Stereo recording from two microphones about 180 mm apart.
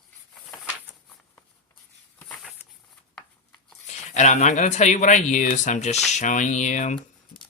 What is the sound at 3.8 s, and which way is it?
Speech, 40° left (ahead or behind).